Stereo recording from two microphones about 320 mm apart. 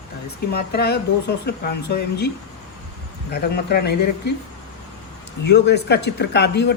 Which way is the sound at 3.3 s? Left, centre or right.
Left.